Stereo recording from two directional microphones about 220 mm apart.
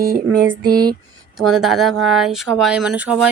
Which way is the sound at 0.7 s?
20° right (ahead or behind).